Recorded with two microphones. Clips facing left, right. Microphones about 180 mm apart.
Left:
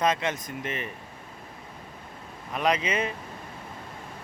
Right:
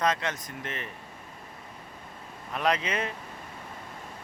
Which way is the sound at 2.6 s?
5° left (ahead or behind).